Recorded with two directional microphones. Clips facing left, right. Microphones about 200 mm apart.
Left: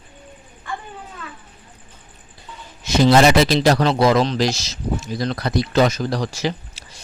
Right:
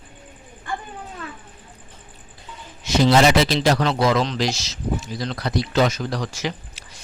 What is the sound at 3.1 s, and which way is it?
Speech, 50° left (ahead or behind).